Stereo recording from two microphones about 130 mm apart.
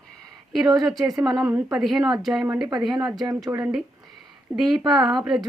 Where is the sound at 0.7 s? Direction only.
30° right (ahead or behind).